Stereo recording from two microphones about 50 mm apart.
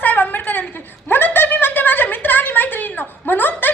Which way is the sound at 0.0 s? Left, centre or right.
Left.